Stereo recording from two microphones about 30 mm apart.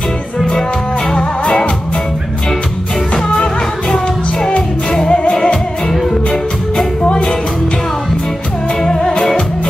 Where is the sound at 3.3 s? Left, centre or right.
Left; by 7.1 s centre.